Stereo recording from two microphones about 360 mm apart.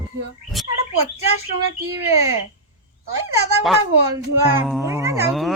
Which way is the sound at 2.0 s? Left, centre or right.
Right.